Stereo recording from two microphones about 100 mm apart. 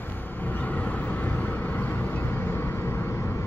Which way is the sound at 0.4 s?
15° left (ahead or behind).